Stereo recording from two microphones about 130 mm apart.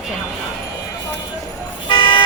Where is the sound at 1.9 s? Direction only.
35° left (ahead or behind).